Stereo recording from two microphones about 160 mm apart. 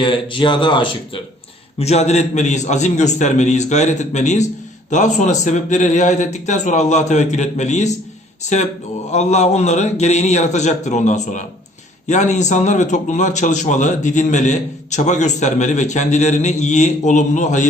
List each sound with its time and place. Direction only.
0.0 s speech: 30° left (ahead or behind)
1.8 s a man's voice: 45° left (ahead or behind)
9.1 s a man's voice: 45° left (ahead or behind)